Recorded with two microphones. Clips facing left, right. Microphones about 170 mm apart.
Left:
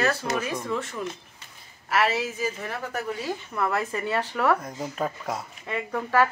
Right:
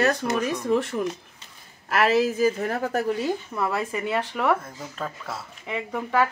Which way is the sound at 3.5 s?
10° right (ahead or behind).